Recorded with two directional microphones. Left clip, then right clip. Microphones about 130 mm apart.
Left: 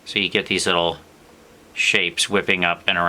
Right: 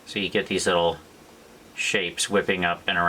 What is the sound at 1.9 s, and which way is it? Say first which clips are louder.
Speech: left 1 dB; 30° left (ahead or behind).